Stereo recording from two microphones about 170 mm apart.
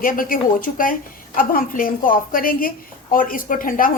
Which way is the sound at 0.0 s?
55° left (ahead or behind).